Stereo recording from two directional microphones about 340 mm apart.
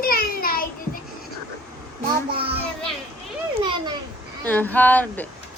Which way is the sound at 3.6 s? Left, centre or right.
Centre.